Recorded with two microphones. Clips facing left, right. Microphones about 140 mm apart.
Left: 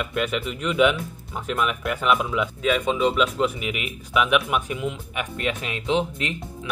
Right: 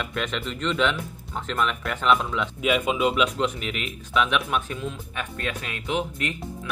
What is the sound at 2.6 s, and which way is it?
Speech, 10° right (ahead or behind).